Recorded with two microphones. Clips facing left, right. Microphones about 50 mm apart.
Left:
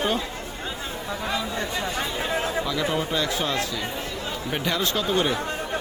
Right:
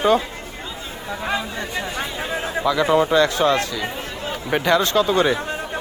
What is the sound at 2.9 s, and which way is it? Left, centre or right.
Speech, right.